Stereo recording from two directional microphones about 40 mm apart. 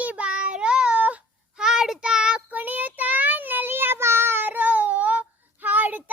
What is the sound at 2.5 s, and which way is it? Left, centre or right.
Child singing, right.